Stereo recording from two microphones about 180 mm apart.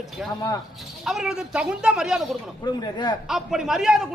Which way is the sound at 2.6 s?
25° left (ahead or behind).